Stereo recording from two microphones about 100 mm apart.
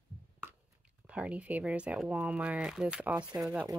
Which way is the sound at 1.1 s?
15° right (ahead or behind).